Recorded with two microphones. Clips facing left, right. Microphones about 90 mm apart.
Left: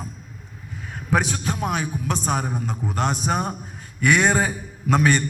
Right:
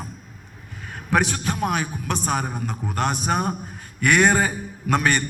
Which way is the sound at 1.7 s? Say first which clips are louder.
Even; 55° right (ahead or behind).